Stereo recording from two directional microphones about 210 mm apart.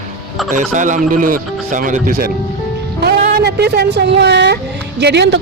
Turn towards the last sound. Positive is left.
turn(degrees=-55)  # may be behind; listen again after turning